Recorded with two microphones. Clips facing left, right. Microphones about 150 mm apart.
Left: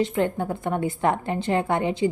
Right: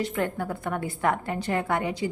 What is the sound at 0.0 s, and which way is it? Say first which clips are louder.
A woman's voice: left 4 dB; 20° left (ahead or behind).